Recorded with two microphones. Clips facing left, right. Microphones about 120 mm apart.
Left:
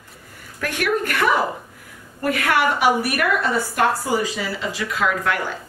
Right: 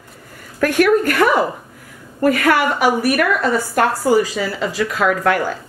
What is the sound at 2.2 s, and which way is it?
Speech, 45° right (ahead or behind).